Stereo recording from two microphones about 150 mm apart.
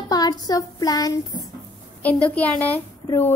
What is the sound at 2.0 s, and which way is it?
A woman's voice, 10° left (ahead or behind).